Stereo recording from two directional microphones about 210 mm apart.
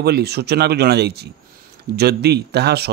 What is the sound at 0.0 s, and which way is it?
Speech, 50° right (ahead or behind).